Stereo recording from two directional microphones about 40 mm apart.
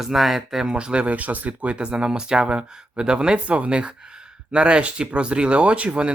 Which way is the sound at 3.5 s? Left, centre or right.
Right.